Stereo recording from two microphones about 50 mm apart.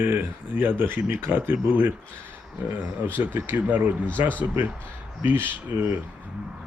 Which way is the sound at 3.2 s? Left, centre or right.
Right.